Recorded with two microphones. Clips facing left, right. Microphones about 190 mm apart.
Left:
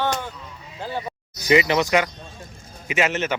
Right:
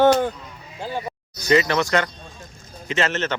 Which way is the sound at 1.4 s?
15° left (ahead or behind).